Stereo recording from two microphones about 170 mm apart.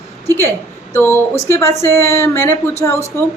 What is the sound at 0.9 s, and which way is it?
A woman's voice, 15° left (ahead or behind).